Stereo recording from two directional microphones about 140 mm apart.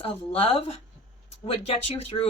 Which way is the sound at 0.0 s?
45° left (ahead or behind).